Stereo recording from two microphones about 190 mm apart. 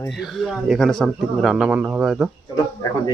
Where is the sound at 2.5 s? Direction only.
15° left (ahead or behind).